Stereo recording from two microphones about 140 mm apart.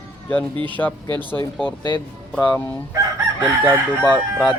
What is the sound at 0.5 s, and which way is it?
Speech, 35° right (ahead or behind).